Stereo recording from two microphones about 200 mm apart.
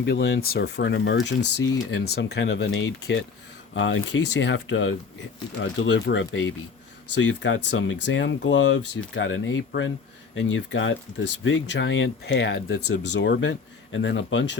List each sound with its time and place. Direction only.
0.0 s speech: 60° left (ahead or behind)